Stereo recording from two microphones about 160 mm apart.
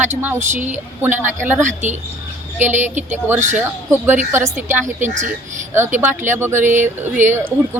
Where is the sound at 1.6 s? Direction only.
50° right (ahead or behind).